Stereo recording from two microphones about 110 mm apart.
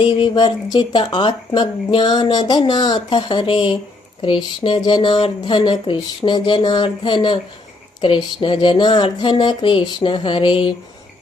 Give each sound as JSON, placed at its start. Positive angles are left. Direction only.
{"t": 0.0, "sound": "speech", "side_deg": 50}